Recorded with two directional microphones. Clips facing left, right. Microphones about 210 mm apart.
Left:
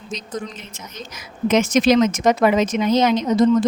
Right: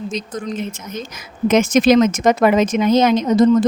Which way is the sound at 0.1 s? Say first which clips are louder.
Right 4 dB; 50° right (ahead or behind).